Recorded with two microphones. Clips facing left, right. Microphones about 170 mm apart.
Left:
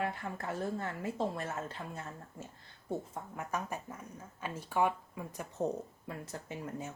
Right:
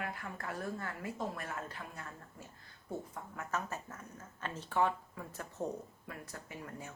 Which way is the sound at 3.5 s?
15° left (ahead or behind).